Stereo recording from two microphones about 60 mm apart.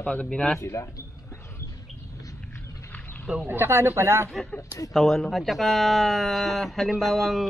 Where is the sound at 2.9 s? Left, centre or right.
Left.